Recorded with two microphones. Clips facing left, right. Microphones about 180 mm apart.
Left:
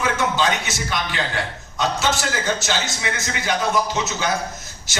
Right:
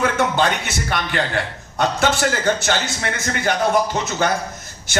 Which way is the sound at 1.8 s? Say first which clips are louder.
Right 4 dB; 60° right (ahead or behind).